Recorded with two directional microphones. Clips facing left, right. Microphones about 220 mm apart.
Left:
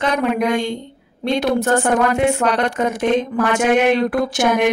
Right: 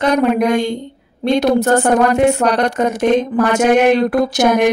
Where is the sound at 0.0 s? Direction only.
40° right (ahead or behind).